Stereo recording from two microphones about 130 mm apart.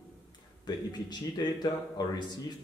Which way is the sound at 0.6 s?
30° left (ahead or behind).